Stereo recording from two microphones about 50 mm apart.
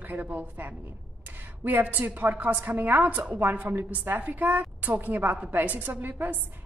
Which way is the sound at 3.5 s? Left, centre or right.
Right.